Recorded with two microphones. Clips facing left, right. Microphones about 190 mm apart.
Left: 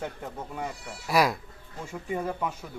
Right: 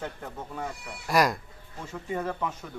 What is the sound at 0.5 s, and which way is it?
Speech, 5° left (ahead or behind).